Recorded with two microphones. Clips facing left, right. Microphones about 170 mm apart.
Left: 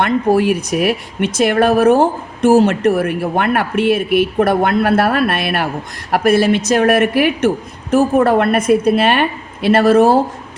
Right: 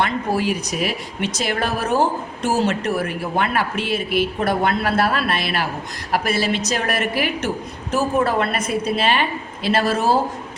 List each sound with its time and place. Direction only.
0.0 s speech: 55° left (ahead or behind)